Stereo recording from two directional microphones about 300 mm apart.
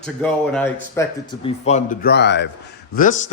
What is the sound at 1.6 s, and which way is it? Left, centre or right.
A man's voice, left.